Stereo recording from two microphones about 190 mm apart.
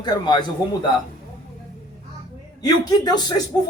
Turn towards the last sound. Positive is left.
turn(degrees=20)  # may be behind; listen again after turning